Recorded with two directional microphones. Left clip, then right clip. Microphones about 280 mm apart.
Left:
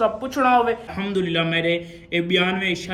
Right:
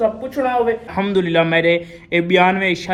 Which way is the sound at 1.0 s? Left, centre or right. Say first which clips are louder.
Right 7 dB; right.